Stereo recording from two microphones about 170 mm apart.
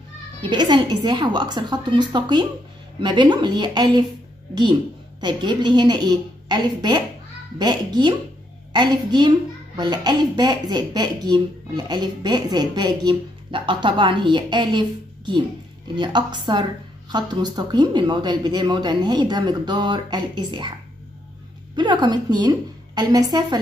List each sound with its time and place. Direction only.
0.4 s speech: 25° right (ahead or behind)
5.2 s speech: 25° right (ahead or behind)
21.7 s speech: 25° right (ahead or behind)